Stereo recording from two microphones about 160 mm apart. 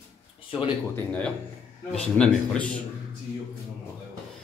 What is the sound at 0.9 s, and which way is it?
A man's voice, 10° left (ahead or behind).